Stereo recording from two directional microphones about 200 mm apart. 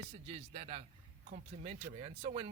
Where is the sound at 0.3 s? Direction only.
30° right (ahead or behind).